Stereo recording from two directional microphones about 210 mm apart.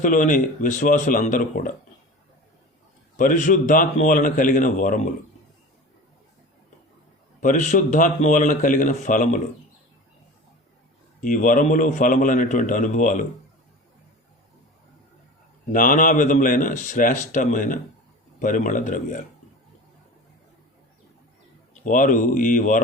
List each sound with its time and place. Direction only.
0.0 s speech: 40° left (ahead or behind)
3.2 s speech: 40° left (ahead or behind)
7.4 s speech: 35° left (ahead or behind)
11.2 s speech: 40° left (ahead or behind)
15.7 s speech: 40° left (ahead or behind)
21.8 s speech: 40° left (ahead or behind)